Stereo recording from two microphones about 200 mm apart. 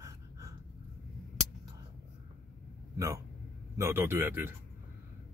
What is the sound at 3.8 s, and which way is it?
Speech, 10° right (ahead or behind).